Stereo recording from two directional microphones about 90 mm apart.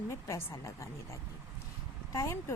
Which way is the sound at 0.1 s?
35° left (ahead or behind).